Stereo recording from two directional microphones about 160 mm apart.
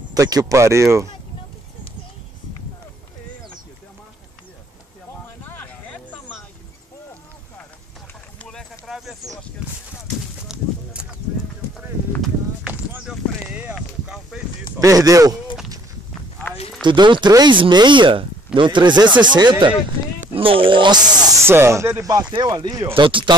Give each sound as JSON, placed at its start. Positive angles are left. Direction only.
{"t": 0.1, "sound": "speech", "side_deg": -25}
{"t": 5.4, "sound": "a sound", "side_deg": 10}
{"t": 8.5, "sound": "clip-clop", "side_deg": 0}
{"t": 10.5, "sound": "clip-clop", "side_deg": -5}
{"t": 12.2, "sound": "a sound", "side_deg": -10}
{"t": 14.8, "sound": "speech", "side_deg": -20}
{"t": 16.8, "sound": "speech", "side_deg": -30}
{"t": 21.5, "sound": "speech", "side_deg": -15}